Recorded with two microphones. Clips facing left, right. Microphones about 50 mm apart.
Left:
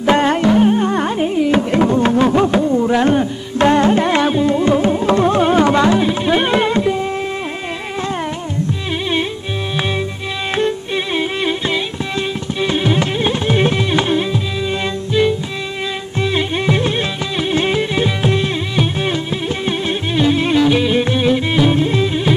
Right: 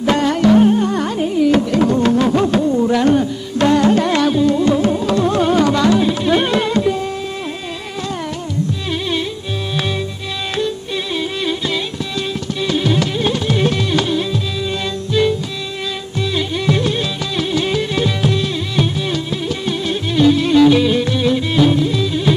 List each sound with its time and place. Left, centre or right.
0.0 s music: left
0.7 s carnatic music: left
5.0 s music: left
11.1 s music: left
16.2 s music: left